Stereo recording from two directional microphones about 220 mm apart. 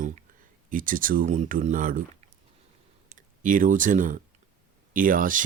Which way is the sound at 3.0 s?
35° right (ahead or behind).